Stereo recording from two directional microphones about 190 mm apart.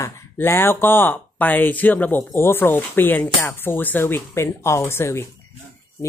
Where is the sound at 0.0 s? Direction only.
10° left (ahead or behind).